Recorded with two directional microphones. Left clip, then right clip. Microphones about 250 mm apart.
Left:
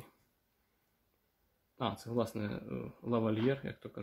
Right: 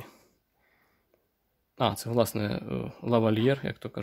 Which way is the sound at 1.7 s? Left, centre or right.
Right.